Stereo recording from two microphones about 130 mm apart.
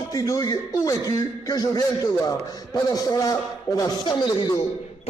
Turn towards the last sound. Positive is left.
turn(degrees=35)  # may be behind; listen again after turning